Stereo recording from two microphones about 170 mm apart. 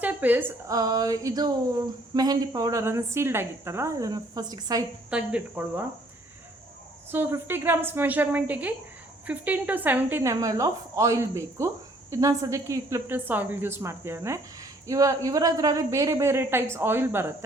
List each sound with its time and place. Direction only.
0.0 s a woman's voice: 10° right (ahead or behind)
5.1 s a woman's voice: 10° right (ahead or behind)
7.1 s a woman's voice: 15° right (ahead or behind)